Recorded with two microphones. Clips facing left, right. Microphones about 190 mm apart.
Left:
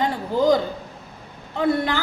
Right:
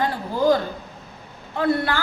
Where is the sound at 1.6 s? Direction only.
20° left (ahead or behind).